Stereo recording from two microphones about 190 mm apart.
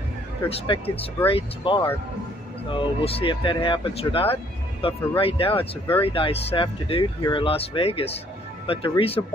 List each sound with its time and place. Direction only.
0.5 s speech: 30° left (ahead or behind)